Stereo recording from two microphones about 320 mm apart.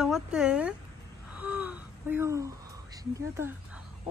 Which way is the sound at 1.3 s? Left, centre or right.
Centre.